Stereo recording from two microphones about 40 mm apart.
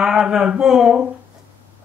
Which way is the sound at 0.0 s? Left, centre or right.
Centre.